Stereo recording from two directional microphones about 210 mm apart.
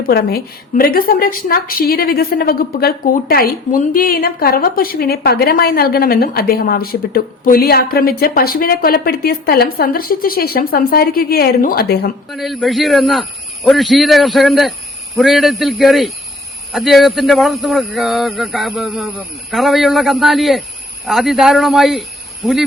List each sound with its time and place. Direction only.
0.0 s a woman's voice: 45° left (ahead or behind)
12.3 s speech: centre (ahead or behind)